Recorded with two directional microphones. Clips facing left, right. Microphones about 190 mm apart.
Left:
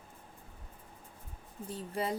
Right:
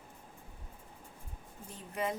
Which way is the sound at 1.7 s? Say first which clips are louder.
Left 2 dB; 35° left (ahead or behind).